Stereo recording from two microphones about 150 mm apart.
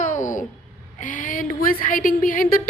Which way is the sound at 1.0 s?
60° left (ahead or behind).